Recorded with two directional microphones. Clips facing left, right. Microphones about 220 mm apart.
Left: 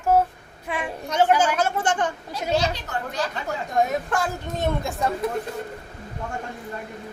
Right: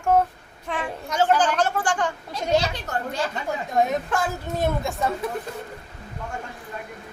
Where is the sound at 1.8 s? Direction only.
20° left (ahead or behind).